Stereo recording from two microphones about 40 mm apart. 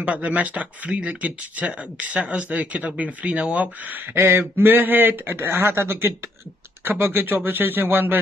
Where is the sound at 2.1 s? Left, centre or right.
Right.